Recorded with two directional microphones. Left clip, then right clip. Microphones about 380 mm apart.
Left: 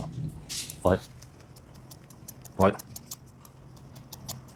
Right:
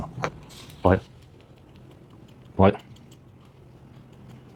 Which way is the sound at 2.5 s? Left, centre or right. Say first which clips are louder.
Right 4 dB; centre.